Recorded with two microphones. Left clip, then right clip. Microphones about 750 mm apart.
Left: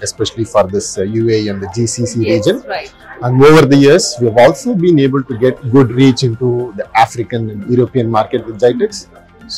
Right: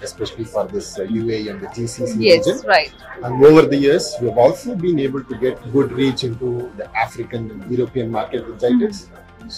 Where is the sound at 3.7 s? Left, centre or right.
Left.